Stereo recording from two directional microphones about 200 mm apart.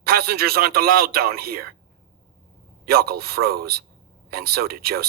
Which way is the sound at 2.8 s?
50° right (ahead or behind).